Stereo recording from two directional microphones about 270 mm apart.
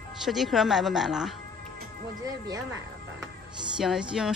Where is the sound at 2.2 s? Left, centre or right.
Centre.